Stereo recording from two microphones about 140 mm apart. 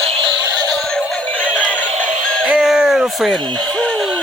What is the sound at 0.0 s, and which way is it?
Synthetic singing, 45° right (ahead or behind).